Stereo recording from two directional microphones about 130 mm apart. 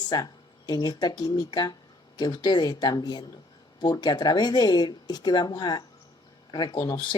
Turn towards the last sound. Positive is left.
turn(degrees=30)  # may be behind; listen again after turning